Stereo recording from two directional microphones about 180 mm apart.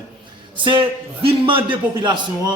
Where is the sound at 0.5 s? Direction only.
25° right (ahead or behind).